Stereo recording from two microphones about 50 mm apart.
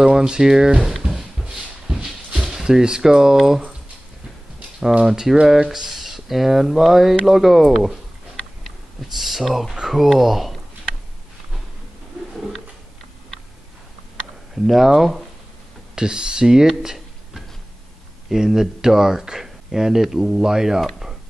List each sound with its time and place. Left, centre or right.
0.0 s speech: centre
1.4 s a sound: centre
2.5 s speech: centre
5.0 s speech: centre
14.5 s speech: centre
15.9 s speech: centre
16.8 s a sound: centre
18.3 s speech: centre